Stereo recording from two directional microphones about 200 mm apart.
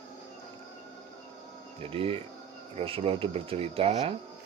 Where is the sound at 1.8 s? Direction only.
25° right (ahead or behind).